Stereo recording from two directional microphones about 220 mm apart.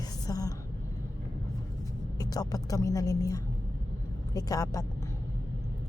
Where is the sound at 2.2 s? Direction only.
15° left (ahead or behind).